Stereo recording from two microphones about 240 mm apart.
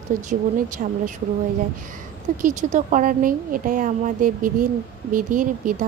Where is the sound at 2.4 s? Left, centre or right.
Right.